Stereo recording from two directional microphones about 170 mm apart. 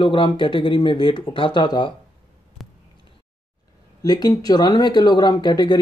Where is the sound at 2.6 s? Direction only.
Centre (ahead or behind).